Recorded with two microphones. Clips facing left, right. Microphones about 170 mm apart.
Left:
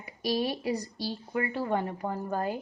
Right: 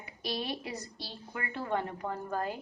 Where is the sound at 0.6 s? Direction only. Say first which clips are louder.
Left 10 dB; 35° left (ahead or behind).